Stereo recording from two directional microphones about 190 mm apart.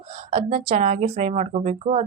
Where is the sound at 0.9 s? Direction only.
45° right (ahead or behind).